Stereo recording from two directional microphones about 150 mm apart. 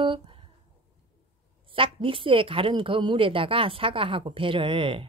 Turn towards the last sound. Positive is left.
turn(degrees=-35)  # may be behind; listen again after turning